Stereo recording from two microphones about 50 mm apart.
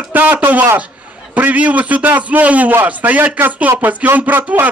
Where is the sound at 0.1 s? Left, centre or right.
Right.